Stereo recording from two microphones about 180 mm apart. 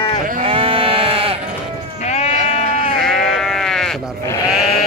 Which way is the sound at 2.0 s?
35° left (ahead or behind).